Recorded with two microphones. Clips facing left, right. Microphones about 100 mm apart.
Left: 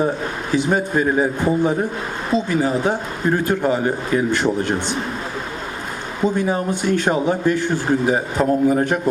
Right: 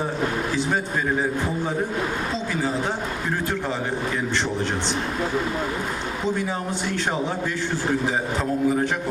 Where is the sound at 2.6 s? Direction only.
55° left (ahead or behind).